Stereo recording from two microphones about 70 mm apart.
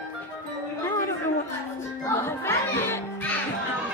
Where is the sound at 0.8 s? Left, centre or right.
Left.